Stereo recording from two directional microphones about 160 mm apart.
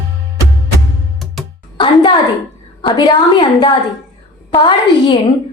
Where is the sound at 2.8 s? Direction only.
30° left (ahead or behind).